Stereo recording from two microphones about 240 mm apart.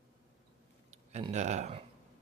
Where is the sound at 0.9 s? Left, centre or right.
Right.